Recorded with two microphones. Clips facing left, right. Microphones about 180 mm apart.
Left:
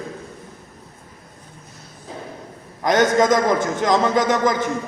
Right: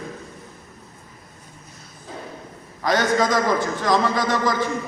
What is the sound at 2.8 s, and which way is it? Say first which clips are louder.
A man's voice: left 4 dB; 20° left (ahead or behind).